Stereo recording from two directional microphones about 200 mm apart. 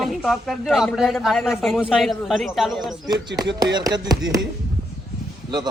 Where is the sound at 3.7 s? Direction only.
20° right (ahead or behind).